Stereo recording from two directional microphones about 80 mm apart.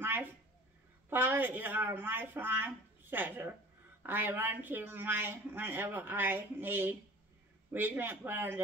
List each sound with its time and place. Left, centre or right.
0.0 s a woman's voice: right